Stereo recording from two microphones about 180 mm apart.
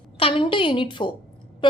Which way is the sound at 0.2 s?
30° left (ahead or behind).